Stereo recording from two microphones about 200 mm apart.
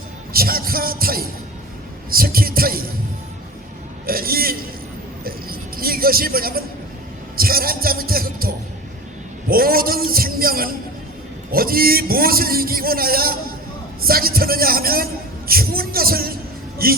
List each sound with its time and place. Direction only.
0.3 s a man's voice: 45° right (ahead or behind)
4.0 s a man's voice: 50° right (ahead or behind)
5.2 s a sound: 45° right (ahead or behind)
7.3 s a man's voice: 50° right (ahead or behind)